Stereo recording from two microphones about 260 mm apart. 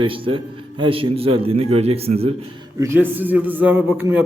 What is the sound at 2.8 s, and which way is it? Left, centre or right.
A man's voice, centre.